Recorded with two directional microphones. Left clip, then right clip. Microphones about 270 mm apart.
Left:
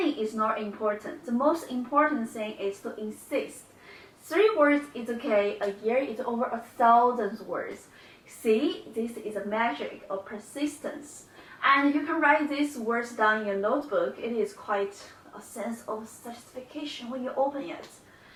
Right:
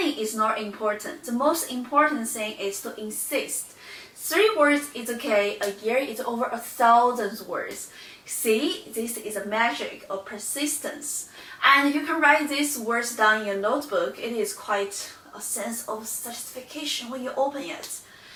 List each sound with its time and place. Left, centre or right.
0.0 s a woman's voice: centre
1.5 s a woman's voice: centre
15.5 s a woman's voice: centre
16.3 s a woman's voice: centre